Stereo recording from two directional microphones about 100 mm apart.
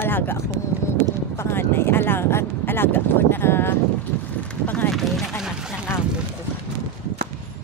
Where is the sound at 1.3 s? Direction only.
25° left (ahead or behind).